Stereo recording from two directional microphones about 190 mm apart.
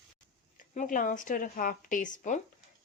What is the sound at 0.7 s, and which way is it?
Speech, 45° left (ahead or behind).